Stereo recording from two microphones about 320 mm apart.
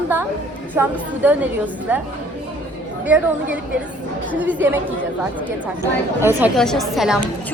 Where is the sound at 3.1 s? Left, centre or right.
Centre.